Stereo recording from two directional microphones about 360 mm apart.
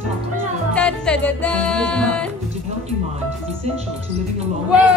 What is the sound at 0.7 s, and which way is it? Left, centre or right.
Music, centre.